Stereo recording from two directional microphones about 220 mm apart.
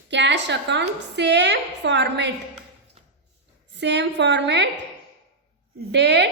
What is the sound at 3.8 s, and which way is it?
Speech, 50° right (ahead or behind).